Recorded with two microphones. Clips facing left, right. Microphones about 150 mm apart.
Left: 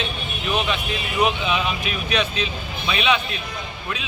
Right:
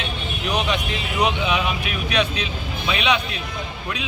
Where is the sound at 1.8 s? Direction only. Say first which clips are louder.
Even; 70° right (ahead or behind).